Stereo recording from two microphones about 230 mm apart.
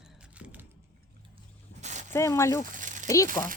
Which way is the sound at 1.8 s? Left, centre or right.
Right.